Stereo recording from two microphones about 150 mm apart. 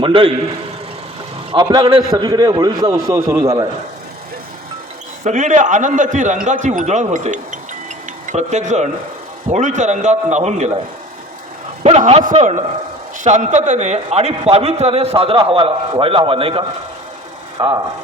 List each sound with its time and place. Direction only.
0.0 s a man's voice: 35° right (ahead or behind)
1.5 s a man's voice: 30° right (ahead or behind)
5.2 s a man's voice: 55° right (ahead or behind)
11.8 s a man's voice: 40° right (ahead or behind)